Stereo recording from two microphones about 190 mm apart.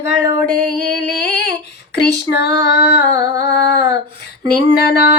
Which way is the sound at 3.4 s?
55° left (ahead or behind).